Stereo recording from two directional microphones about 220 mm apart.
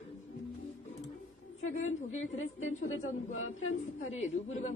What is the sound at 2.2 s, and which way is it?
Speech, 30° left (ahead or behind).